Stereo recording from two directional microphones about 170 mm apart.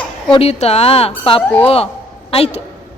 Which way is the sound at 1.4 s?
10° left (ahead or behind).